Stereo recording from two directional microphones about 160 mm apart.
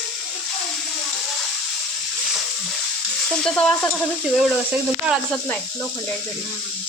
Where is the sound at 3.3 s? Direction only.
5° left (ahead or behind).